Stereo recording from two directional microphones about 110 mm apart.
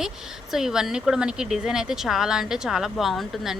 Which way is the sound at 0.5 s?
5° right (ahead or behind).